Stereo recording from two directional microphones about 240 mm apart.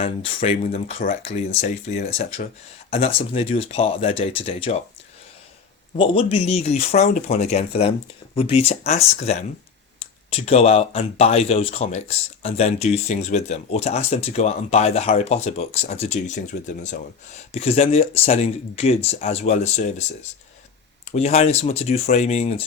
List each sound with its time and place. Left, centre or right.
0.0 s speech: left
6.0 s speech: left
21.1 s speech: left